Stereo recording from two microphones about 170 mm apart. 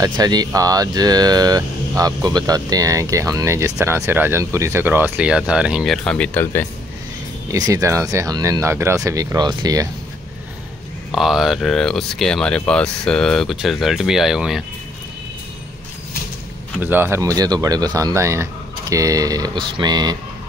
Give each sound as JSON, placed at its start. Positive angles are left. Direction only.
{"t": 0.0, "sound": "speech", "side_deg": -25}
{"t": 7.5, "sound": "speech", "side_deg": -20}
{"t": 11.1, "sound": "speech", "side_deg": 0}
{"t": 16.8, "sound": "speech", "side_deg": -10}